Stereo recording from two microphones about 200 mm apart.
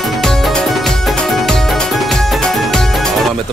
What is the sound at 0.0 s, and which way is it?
Music, centre (ahead or behind).